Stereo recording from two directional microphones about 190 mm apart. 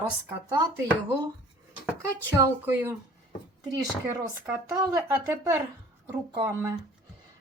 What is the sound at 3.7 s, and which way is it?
Speech, 20° right (ahead or behind).